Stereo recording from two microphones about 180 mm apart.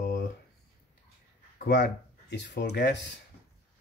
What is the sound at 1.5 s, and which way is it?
Speech, 70° left (ahead or behind).